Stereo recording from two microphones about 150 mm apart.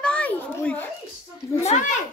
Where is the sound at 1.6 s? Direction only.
50° left (ahead or behind).